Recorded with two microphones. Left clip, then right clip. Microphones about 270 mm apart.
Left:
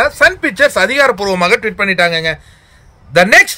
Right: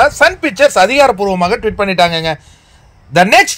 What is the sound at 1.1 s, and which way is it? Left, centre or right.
Speech, centre.